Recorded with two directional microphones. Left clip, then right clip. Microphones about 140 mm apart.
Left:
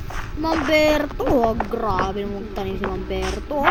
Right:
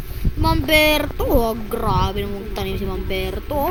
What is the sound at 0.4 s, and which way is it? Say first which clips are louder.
Speech: right 2 dB; 10° right (ahead or behind).